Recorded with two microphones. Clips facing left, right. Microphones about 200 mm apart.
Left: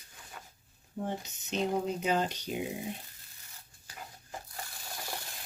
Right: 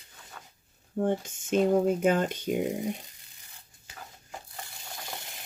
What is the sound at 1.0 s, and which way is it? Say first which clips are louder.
Speech: right 9 dB; 55° right (ahead or behind).